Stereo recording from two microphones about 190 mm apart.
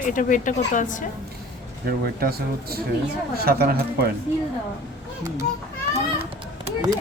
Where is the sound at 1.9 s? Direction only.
55° right (ahead or behind).